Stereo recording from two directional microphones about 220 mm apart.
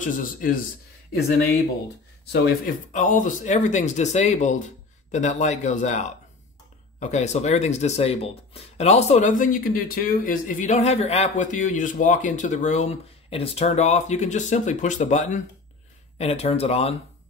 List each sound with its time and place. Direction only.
0.0 s speech: 40° left (ahead or behind)
2.6 s speech: 35° left (ahead or behind)